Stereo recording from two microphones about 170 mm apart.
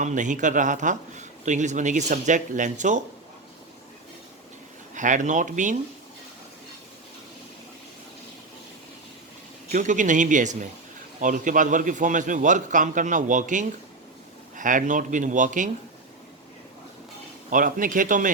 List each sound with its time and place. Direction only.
0.0 s a man's voice: 45° right (ahead or behind)
4.9 s a man's voice: 50° right (ahead or behind)
9.7 s a man's voice: 45° right (ahead or behind)
17.5 s a man's voice: 50° right (ahead or behind)